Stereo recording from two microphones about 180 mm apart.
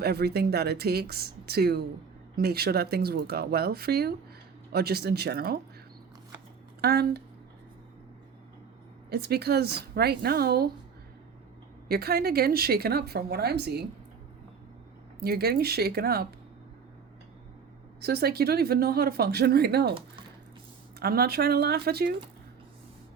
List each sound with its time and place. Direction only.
0.0 s a woman's voice: 60° right (ahead or behind)
6.8 s a woman's voice: 60° right (ahead or behind)
9.0 s a woman's voice: 60° right (ahead or behind)
11.9 s a woman's voice: 60° right (ahead or behind)
15.2 s a woman's voice: 60° right (ahead or behind)
18.0 s a woman's voice: 60° right (ahead or behind)
21.0 s a woman's voice: 60° right (ahead or behind)